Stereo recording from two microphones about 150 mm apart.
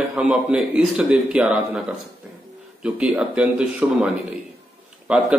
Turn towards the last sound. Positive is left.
turn(degrees=-10)  # may be behind; listen again after turning